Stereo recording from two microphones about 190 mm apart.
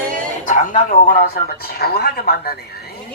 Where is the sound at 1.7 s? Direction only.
55° left (ahead or behind).